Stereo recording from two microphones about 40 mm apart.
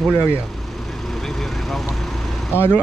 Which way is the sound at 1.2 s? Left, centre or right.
Centre.